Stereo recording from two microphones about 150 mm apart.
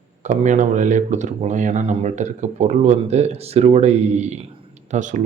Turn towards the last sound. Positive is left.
turn(degrees=-55)  # may be behind; listen again after turning